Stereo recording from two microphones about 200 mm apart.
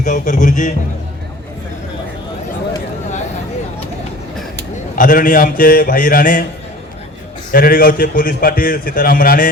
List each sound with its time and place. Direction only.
0.0 s a man's voice: 40° left (ahead or behind)
4.9 s a man's voice: 40° left (ahead or behind)
7.5 s a man's voice: 45° left (ahead or behind)